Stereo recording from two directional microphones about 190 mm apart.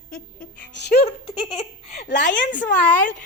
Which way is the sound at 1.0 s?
30° left (ahead or behind).